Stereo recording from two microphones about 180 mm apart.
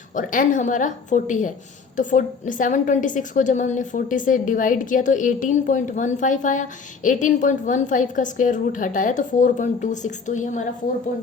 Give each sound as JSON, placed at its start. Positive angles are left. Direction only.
{"t": 0.1, "sound": "a woman's voice", "side_deg": 45}